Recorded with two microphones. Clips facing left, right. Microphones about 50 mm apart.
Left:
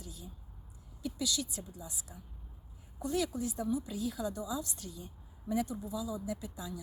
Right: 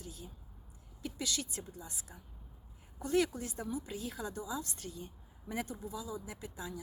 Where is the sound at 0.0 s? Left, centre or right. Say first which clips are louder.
Right 1 dB; right.